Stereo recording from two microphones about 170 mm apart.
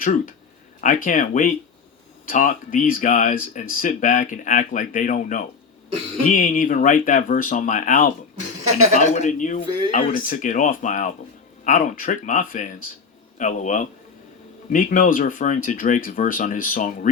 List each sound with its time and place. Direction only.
0.0 s speech: 55° left (ahead or behind)